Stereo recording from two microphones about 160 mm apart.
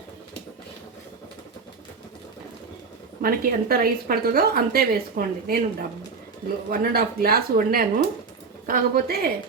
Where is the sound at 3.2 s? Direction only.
65° right (ahead or behind).